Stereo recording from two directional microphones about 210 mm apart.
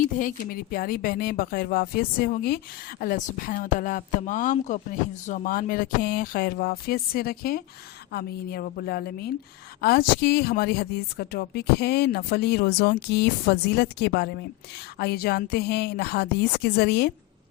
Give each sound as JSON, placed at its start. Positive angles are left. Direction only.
{"t": 0.0, "sound": "a woman's voice", "side_deg": 40}